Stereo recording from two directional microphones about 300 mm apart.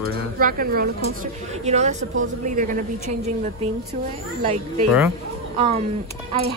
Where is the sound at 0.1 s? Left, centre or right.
Right.